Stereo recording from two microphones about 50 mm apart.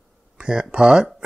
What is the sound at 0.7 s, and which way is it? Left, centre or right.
Speech, centre.